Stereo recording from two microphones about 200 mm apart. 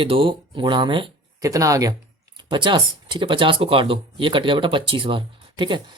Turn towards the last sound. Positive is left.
turn(degrees=-25)  # may be behind; listen again after turning